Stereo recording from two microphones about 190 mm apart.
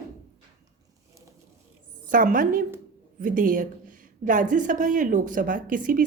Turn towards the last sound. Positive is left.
turn(degrees=-45)  # may be behind; listen again after turning